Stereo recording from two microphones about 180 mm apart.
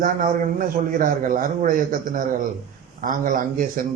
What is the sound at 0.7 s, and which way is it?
A man's voice, 50° right (ahead or behind).